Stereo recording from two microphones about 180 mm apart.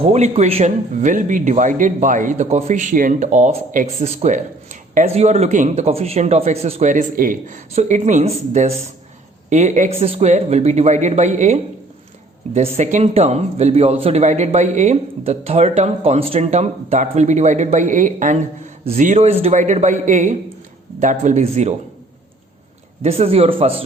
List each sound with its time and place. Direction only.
0.0 s speech: 35° right (ahead or behind)
23.0 s speech: 35° right (ahead or behind)